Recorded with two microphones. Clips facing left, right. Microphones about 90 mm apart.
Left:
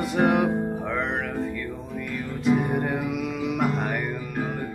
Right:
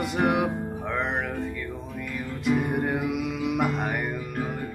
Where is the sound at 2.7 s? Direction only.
5° right (ahead or behind).